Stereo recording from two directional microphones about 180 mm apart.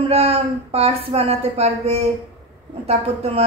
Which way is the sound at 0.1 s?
35° right (ahead or behind).